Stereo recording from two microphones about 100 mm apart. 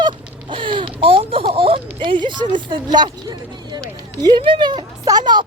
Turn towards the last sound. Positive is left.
turn(degrees=-50)  # may be behind; listen again after turning